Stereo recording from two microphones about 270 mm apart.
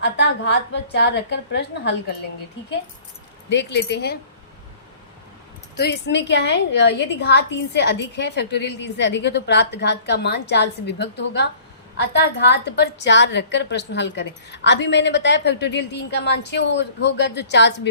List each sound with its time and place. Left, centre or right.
0.0 s a woman's voice: left
3.5 s a woman's voice: left
5.7 s a woman's voice: left